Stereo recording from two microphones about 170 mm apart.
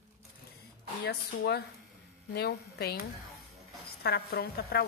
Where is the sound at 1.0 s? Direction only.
70° left (ahead or behind).